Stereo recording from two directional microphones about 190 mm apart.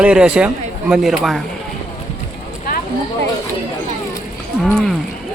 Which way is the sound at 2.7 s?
50° left (ahead or behind).